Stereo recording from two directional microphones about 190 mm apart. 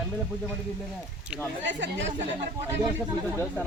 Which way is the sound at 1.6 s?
70° right (ahead or behind).